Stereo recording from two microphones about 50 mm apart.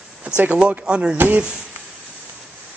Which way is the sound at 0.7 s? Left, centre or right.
Right.